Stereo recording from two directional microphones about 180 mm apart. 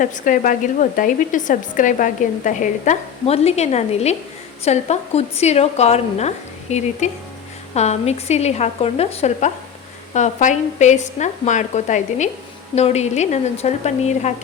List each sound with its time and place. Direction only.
0.0 s speech: 45° left (ahead or behind)